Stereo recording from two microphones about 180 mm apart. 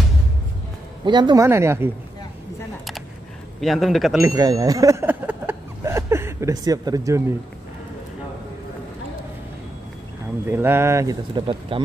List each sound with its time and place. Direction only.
1.0 s speech: 25° right (ahead or behind)
3.6 s speech: centre (ahead or behind)
4.2 s a sound: 20° right (ahead or behind)
10.4 s speech: 10° right (ahead or behind); by 11.8 s 25° right (ahead or behind)